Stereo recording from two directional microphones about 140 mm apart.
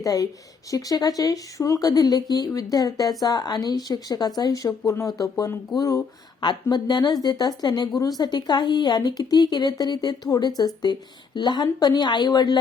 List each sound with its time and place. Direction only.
0.0 s speech: 25° left (ahead or behind)